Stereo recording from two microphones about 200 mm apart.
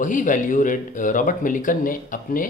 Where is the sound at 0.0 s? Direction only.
40° left (ahead or behind).